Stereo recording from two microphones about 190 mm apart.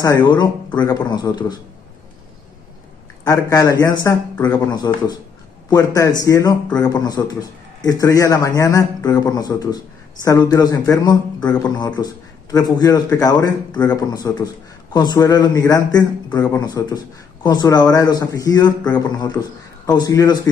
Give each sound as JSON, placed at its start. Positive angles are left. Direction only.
{"t": 0.0, "sound": "a man's voice", "side_deg": 15}
{"t": 3.3, "sound": "a man's voice", "side_deg": 20}